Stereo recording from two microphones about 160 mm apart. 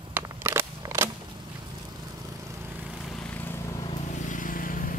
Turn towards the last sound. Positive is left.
turn(degrees=60)  # may be behind; listen again after turning